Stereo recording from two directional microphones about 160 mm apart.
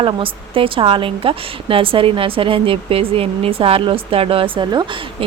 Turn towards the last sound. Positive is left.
turn(degrees=-25)  # may be behind; listen again after turning